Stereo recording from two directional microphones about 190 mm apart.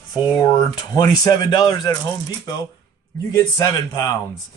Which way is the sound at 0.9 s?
20° left (ahead or behind).